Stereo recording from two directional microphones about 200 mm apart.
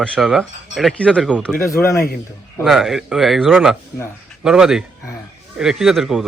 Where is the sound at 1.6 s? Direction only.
15° left (ahead or behind).